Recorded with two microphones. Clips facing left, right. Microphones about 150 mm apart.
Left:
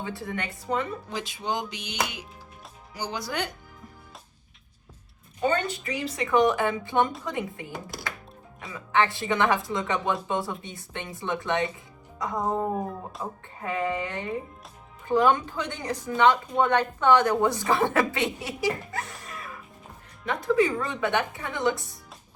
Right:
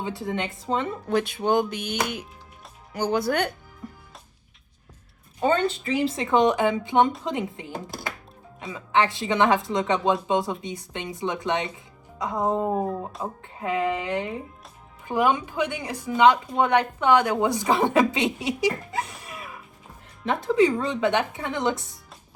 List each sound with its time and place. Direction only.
0.0 s speech: 20° right (ahead or behind)
1.0 s music: 60° right (ahead or behind)
5.6 s speech: 25° right (ahead or behind)
13.2 s speech: 10° right (ahead or behind)